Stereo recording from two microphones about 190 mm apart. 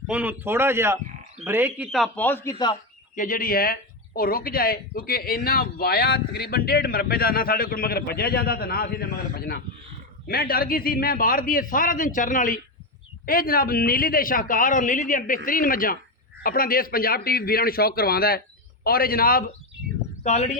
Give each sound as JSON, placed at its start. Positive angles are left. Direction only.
{"t": 0.1, "sound": "a man's voice", "side_deg": -10}
{"t": 3.2, "sound": "speech", "side_deg": 45}
{"t": 20.2, "sound": "speech", "side_deg": 40}